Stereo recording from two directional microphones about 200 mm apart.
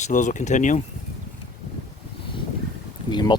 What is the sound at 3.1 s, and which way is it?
Speech, 25° left (ahead or behind).